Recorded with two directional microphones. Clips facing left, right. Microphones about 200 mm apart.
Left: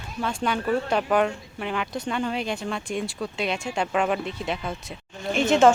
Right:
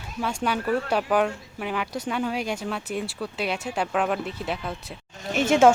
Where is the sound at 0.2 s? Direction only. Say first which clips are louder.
Even; 10° right (ahead or behind).